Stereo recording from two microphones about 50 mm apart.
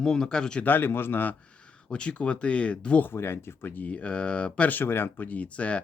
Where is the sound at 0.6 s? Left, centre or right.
Left.